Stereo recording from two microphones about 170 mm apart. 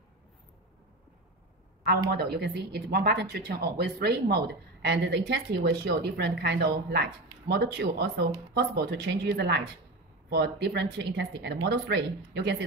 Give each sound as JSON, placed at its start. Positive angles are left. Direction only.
{"t": 2.1, "sound": "speech", "side_deg": -70}